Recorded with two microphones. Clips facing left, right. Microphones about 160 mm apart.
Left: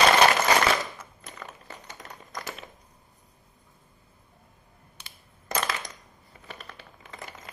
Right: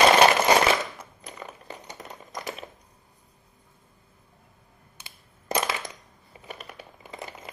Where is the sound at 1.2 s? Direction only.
15° right (ahead or behind).